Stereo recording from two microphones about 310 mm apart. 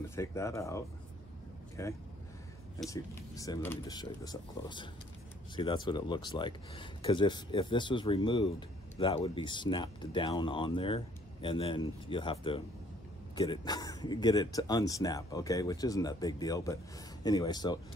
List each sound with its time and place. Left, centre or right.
0.1 s speech: centre